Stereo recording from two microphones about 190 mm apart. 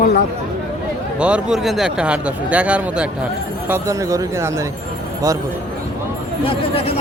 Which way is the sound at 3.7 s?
15° right (ahead or behind).